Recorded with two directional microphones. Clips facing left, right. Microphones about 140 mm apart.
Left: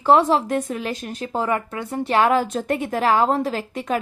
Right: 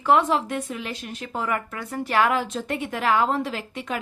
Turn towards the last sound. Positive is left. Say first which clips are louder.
# left 6 dB
turn(degrees=40)  # may be behind; listen again after turning